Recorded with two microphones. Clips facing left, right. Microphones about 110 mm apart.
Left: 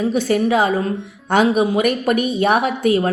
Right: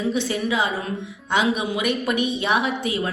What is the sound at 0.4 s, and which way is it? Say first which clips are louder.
A woman's voice: left 7 dB; 40° left (ahead or behind).